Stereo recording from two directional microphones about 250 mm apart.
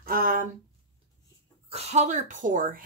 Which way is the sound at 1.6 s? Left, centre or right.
Right.